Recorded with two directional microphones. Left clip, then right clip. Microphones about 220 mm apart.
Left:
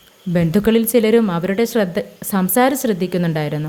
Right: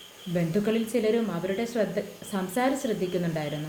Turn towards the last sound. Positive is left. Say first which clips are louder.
# left 8 dB
turn(degrees=50)  # may be behind; listen again after turning